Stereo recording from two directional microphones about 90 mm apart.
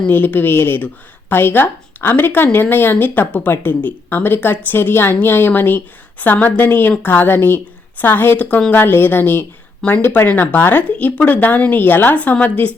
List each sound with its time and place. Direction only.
0.1 s speech: 20° left (ahead or behind)